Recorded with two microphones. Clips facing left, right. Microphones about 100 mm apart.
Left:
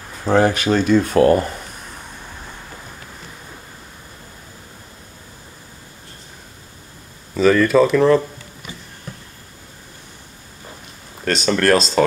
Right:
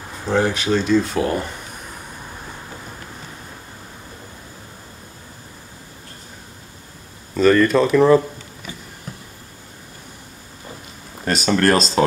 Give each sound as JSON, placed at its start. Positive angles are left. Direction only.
{"t": 0.3, "sound": "speech", "side_deg": 55}
{"t": 7.3, "sound": "speech", "side_deg": 0}
{"t": 11.2, "sound": "speech", "side_deg": -5}